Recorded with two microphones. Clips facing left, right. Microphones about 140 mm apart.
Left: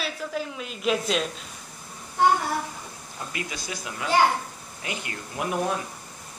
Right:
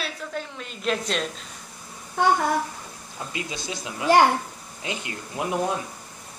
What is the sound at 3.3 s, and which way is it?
Speech, 25° right (ahead or behind).